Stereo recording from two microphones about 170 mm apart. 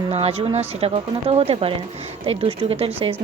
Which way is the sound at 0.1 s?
35° right (ahead or behind).